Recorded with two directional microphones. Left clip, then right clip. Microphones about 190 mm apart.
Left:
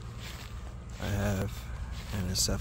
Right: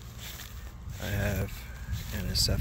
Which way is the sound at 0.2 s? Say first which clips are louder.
Right 2 dB; 55° right (ahead or behind).